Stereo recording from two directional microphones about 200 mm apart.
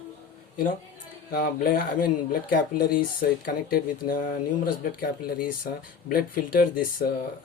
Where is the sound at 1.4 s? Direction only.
45° left (ahead or behind).